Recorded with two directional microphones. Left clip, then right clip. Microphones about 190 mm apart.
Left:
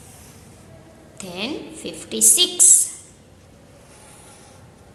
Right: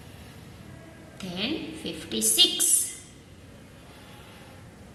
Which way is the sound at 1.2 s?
20° left (ahead or behind).